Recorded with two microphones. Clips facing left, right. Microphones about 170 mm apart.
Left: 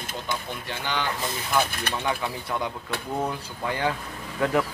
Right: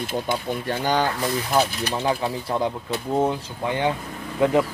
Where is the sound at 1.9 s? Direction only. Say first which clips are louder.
Right 5 dB; 25° right (ahead or behind).